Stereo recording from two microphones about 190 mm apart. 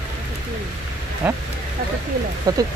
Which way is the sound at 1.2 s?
10° right (ahead or behind).